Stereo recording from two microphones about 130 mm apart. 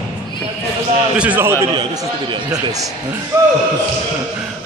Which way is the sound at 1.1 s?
10° right (ahead or behind).